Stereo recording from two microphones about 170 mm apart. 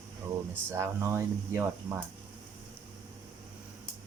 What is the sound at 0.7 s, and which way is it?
Speech, 15° right (ahead or behind).